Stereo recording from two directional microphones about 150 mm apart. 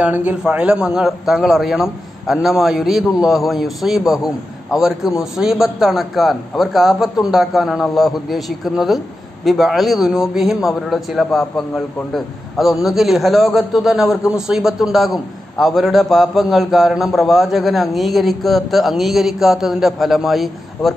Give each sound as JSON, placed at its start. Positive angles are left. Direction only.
{"t": 0.0, "sound": "a man's voice", "side_deg": -10}